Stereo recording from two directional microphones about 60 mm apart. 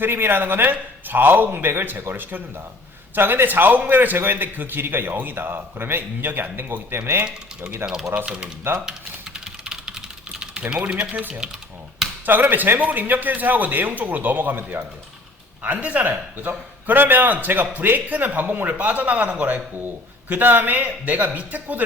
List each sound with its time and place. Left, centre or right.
0.0 s a man's voice: right
7.9 s speech: centre
8.9 s typing: centre
10.8 s a man's voice: right